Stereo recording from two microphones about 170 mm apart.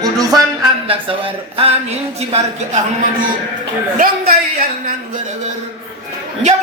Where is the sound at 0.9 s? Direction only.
35° right (ahead or behind).